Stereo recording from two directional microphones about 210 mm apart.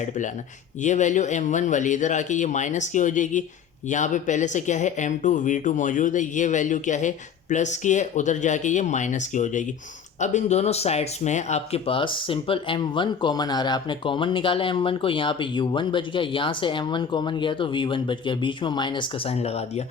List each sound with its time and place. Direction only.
0.8 s speech: 35° left (ahead or behind)